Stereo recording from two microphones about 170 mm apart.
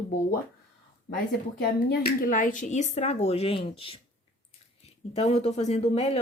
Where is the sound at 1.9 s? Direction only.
60° left (ahead or behind); by 4.0 s 35° left (ahead or behind).